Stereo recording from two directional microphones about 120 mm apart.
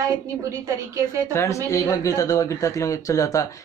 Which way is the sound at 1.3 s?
25° left (ahead or behind).